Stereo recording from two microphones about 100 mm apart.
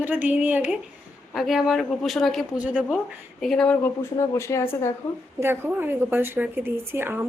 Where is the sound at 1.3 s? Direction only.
Centre (ahead or behind).